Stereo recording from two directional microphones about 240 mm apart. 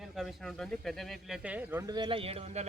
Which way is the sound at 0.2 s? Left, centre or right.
Centre.